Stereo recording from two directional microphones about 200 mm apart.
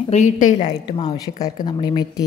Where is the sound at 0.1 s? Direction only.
40° left (ahead or behind).